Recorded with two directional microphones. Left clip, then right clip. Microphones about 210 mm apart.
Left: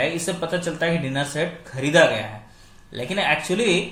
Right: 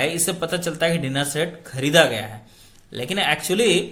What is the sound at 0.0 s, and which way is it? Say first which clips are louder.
Speech: right 1 dB; 35° right (ahead or behind).